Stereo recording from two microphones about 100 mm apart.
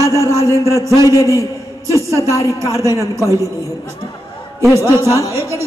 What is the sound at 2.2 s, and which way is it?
Speech, 30° left (ahead or behind).